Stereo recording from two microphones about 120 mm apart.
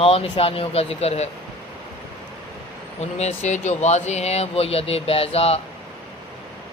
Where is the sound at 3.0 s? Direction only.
65° left (ahead or behind).